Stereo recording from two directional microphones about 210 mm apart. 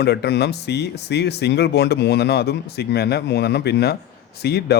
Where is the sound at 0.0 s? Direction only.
50° left (ahead or behind).